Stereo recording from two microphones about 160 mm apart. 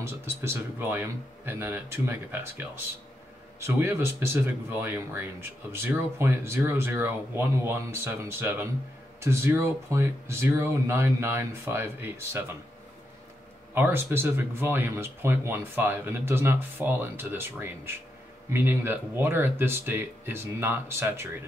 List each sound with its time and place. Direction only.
0.0 s speech: 15° right (ahead or behind)
13.7 s speech: 15° right (ahead or behind)